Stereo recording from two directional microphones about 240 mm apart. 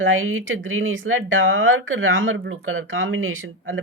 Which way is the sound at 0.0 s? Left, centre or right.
Right.